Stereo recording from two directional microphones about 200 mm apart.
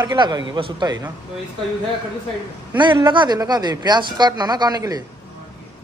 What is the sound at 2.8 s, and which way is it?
Speech, 20° right (ahead or behind).